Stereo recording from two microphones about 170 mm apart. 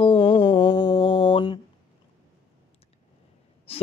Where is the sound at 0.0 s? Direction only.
30° left (ahead or behind).